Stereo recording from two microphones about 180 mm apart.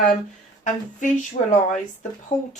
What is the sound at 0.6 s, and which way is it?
Speech, 45° left (ahead or behind).